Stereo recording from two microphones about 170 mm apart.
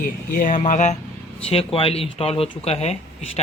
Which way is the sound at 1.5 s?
35° left (ahead or behind).